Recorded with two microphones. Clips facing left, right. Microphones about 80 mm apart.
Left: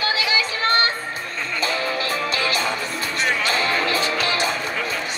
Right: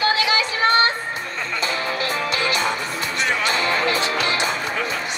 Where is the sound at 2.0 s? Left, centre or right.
Right.